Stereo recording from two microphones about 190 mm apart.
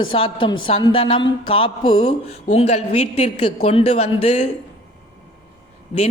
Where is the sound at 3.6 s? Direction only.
35° left (ahead or behind).